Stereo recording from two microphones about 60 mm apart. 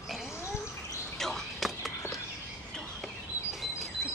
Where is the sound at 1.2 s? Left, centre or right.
Centre.